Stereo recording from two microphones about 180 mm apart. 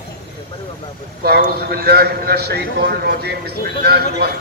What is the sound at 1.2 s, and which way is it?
A man's voice, 60° right (ahead or behind).